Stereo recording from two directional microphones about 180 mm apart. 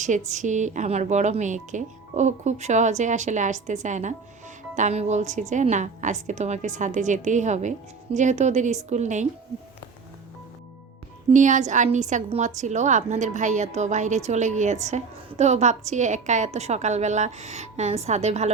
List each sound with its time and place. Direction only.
0.3 s a woman's voice: 40° right (ahead or behind)
11.3 s a woman's voice: 45° right (ahead or behind)